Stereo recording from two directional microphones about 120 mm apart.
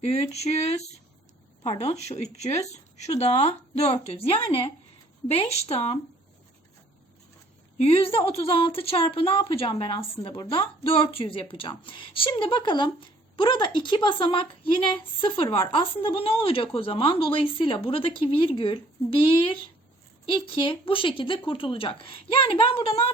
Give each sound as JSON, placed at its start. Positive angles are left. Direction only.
{"t": 0.0, "sound": "speech", "side_deg": 65}
{"t": 7.8, "sound": "a woman's voice", "side_deg": 55}